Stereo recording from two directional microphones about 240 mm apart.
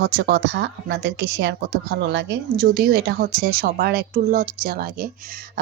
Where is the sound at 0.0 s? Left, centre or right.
Right.